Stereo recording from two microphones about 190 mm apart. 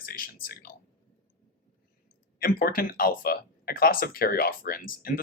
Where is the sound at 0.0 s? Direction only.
50° left (ahead or behind).